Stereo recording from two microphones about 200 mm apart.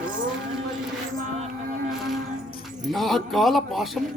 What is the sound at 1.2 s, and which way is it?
Music, 40° right (ahead or behind).